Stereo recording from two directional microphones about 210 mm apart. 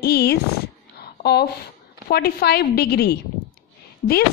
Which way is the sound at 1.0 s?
50° left (ahead or behind).